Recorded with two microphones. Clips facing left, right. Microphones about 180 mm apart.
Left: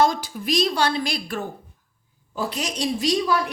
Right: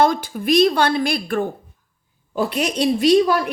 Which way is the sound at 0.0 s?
55° right (ahead or behind).